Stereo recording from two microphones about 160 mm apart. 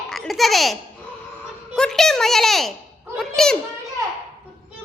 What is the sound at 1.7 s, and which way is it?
Speech, 5° left (ahead or behind).